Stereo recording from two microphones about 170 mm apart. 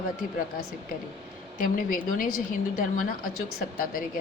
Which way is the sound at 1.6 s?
55° left (ahead or behind).